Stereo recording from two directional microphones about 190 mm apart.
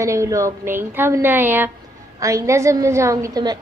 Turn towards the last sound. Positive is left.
turn(degrees=-20)  # may be behind; listen again after turning